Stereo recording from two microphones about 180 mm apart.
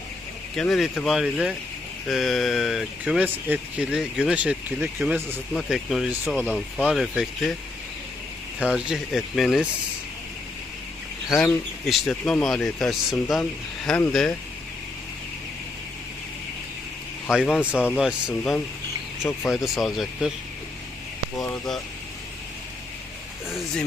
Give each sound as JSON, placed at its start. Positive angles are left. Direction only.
{"t": 0.5, "sound": "speech", "side_deg": 0}
{"t": 8.5, "sound": "speech", "side_deg": -5}
{"t": 11.9, "sound": "speech", "side_deg": 0}
{"t": 17.3, "sound": "speech", "side_deg": 0}
{"t": 17.7, "sound": "speech", "side_deg": 10}
{"t": 18.0, "sound": "speech", "side_deg": 0}
{"t": 23.5, "sound": "speech", "side_deg": 0}